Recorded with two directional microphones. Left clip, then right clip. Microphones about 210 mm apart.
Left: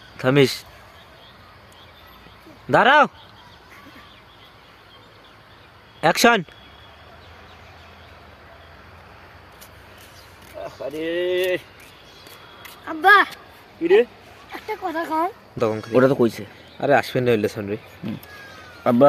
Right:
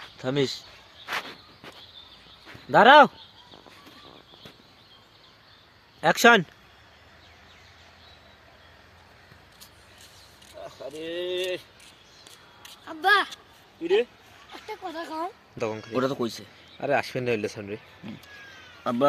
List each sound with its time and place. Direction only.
0.2 s speech: 10° left (ahead or behind)
2.6 s speech: 5° left (ahead or behind)
6.0 s speech: 5° left (ahead or behind)
10.6 s speech: 5° left (ahead or behind)
12.6 s a sound: centre (ahead or behind)
13.8 s speech: 5° left (ahead or behind)
15.9 s speech: 30° left (ahead or behind)
16.8 s speech: centre (ahead or behind)
18.8 s a man's voice: 30° left (ahead or behind)